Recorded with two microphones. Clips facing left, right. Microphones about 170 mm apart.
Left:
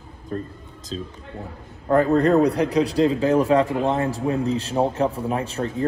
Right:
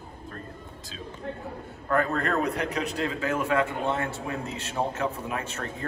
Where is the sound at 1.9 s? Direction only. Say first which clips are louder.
Left 9 dB; 35° left (ahead or behind).